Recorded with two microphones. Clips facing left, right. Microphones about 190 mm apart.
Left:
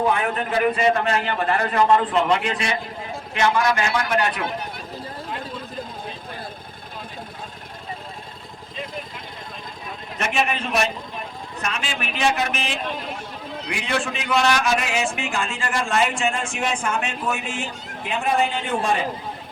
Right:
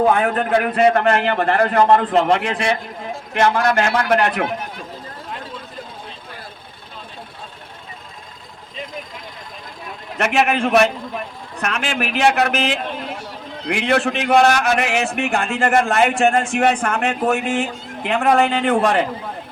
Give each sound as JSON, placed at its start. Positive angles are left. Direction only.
{"t": 0.0, "sound": "a man's voice", "side_deg": -55}
{"t": 10.2, "sound": "a man's voice", "side_deg": -75}
{"t": 13.7, "sound": "a man's voice", "side_deg": -65}